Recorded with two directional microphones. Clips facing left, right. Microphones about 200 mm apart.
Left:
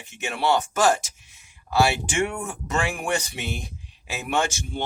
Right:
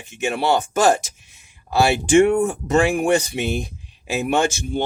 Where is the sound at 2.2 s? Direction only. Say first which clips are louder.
Right 12 dB; 35° right (ahead or behind).